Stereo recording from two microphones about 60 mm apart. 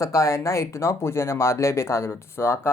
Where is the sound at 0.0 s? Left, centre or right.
Left.